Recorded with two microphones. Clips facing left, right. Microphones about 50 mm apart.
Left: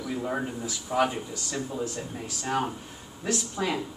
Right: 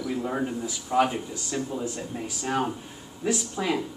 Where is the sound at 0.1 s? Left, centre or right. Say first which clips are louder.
Right 1 dB; centre.